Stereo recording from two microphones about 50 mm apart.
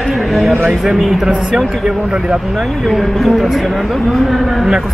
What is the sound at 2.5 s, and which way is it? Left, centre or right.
Speech, centre.